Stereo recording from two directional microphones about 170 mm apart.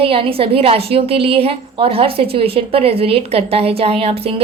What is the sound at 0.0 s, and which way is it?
A woman's voice, 35° right (ahead or behind).